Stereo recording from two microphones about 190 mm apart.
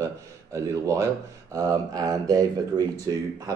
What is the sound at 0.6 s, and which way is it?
A man's voice, 15° right (ahead or behind).